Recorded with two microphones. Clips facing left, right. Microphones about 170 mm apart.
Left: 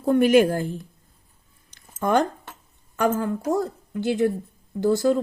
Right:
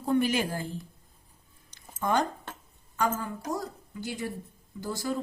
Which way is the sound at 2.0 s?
60° left (ahead or behind).